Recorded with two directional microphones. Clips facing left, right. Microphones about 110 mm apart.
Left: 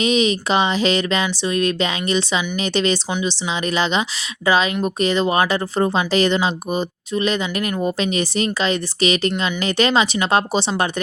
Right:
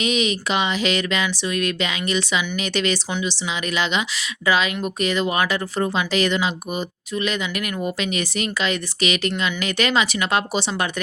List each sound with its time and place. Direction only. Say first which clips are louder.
0.0 s speech: left 4 dB; 30° left (ahead or behind)
3.1 s a woman's voice: left 3 dB; 20° left (ahead or behind)
3.5 s speech: left 4 dB; 30° left (ahead or behind)